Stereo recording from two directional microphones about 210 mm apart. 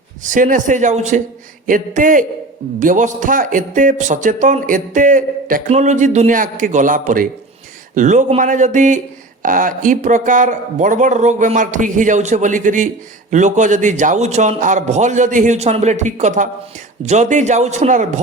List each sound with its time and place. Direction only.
0.2 s speech: 40° right (ahead or behind)